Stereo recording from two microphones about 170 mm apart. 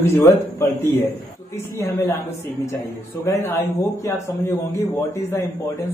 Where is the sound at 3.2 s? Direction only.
15° left (ahead or behind).